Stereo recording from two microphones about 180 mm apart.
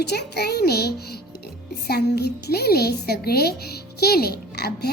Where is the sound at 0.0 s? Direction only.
65° left (ahead or behind).